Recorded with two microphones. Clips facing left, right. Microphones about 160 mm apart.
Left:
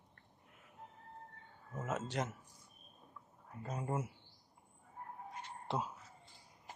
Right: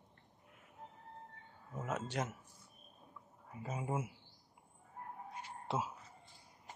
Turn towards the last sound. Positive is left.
turn(degrees=-5)  # may be behind; listen again after turning